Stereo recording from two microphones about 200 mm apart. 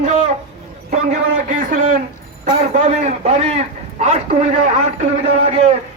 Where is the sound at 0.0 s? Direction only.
35° right (ahead or behind).